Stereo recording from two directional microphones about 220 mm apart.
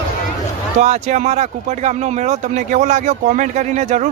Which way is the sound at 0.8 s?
30° right (ahead or behind).